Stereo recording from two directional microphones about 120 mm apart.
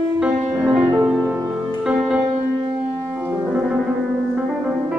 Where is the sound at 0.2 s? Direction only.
10° right (ahead or behind).